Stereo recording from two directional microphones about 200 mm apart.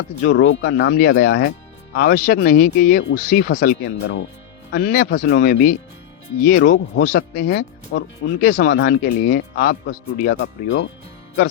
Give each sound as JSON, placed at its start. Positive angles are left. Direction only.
{"t": 0.2, "sound": "speech", "side_deg": 60}
{"t": 4.8, "sound": "speech", "side_deg": 45}